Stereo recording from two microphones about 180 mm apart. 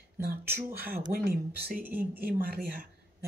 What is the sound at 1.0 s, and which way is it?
Speech, 60° right (ahead or behind).